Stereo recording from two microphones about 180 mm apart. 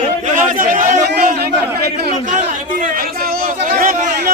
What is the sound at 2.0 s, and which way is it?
Chatter, 45° right (ahead or behind).